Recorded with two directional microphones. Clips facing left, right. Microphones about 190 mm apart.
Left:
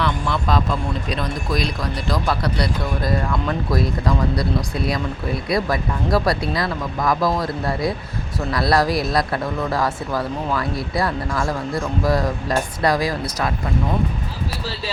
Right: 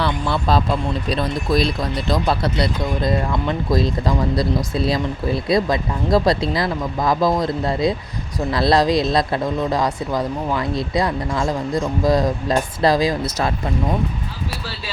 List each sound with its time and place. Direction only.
0.0 s speech: 30° right (ahead or behind)